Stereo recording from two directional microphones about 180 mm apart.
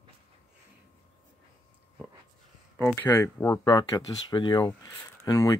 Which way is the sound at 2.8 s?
15° left (ahead or behind).